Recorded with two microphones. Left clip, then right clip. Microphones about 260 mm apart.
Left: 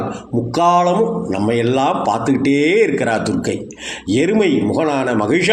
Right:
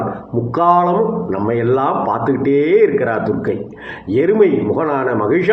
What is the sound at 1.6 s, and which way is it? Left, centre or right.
A man's voice, left.